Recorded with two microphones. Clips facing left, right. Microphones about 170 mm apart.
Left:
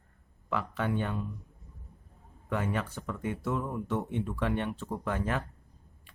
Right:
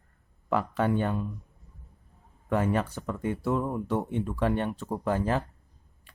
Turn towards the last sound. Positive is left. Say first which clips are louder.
# right 5 dB
turn(degrees=-35)  # may be behind; listen again after turning